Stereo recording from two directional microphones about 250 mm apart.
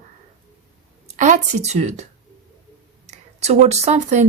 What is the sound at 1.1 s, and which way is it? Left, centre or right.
Speech, right.